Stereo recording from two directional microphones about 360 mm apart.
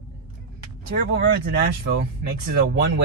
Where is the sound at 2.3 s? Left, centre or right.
Right.